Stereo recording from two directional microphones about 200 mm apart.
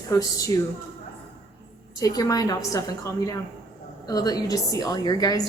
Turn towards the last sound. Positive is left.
turn(degrees=20)  # may be behind; listen again after turning